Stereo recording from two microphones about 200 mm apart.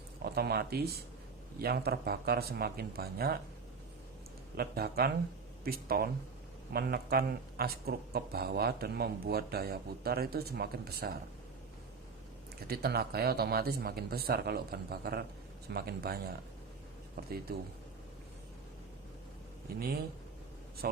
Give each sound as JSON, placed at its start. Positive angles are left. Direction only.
{"t": 0.3, "sound": "speech", "side_deg": -50}
{"t": 4.5, "sound": "speech", "side_deg": -50}
{"t": 12.5, "sound": "speech", "side_deg": -50}
{"t": 17.5, "sound": "speech", "side_deg": -50}
{"t": 19.7, "sound": "speech", "side_deg": -50}